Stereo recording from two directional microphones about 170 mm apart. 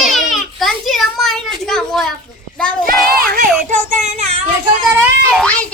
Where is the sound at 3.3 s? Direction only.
45° right (ahead or behind).